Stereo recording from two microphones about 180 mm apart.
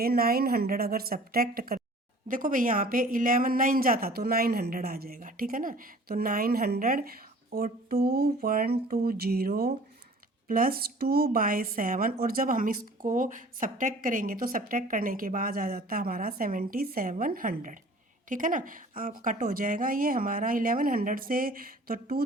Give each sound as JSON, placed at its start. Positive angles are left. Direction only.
{"t": 0.0, "sound": "a woman's voice", "side_deg": -55}